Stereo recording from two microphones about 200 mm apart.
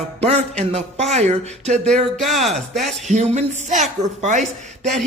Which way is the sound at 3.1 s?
35° right (ahead or behind).